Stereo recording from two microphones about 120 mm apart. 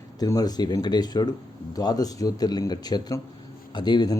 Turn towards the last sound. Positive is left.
turn(degrees=35)  # may be behind; listen again after turning